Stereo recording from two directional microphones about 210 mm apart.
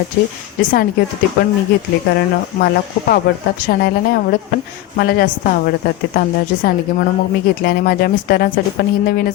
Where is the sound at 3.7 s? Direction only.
45° left (ahead or behind).